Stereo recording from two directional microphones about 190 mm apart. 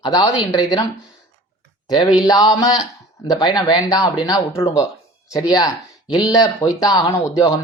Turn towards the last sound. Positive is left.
turn(degrees=15)  # may be behind; listen again after turning